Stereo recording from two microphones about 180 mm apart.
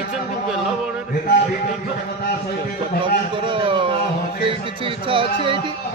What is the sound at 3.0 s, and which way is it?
Speech, 30° right (ahead or behind).